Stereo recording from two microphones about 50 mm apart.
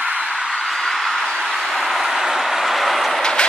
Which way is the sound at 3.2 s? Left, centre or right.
Centre.